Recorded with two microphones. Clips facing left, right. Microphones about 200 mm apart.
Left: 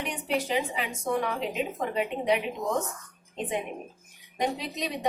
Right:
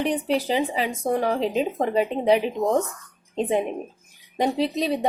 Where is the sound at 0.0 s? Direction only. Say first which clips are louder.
Right 7 dB; 35° right (ahead or behind).